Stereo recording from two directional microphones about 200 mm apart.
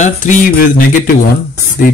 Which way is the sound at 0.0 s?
40° left (ahead or behind).